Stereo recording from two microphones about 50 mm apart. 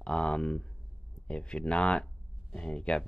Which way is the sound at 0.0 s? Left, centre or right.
Centre.